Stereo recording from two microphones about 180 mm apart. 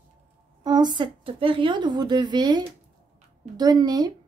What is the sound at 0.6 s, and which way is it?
A woman's voice, 25° right (ahead or behind).